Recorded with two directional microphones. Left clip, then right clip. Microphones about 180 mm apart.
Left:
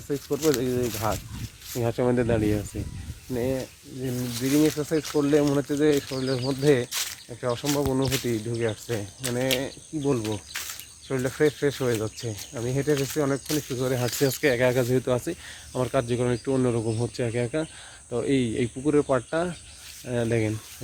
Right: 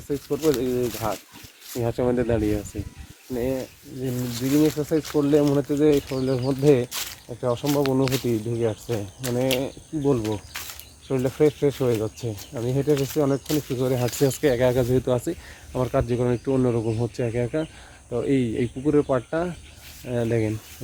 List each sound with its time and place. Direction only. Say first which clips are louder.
0.3 s speech: right 2 dB; 5° left (ahead or behind)
1.8 s speech: right 1 dB; 20° left (ahead or behind)
5.6 s speech: right 3 dB; 5° left (ahead or behind)
10.2 s speech: right 3 dB; 25° left (ahead or behind)
10.5 s speech: left 1 dB; centre (ahead or behind)